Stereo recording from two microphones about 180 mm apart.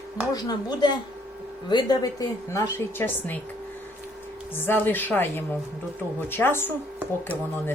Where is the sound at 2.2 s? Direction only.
20° left (ahead or behind).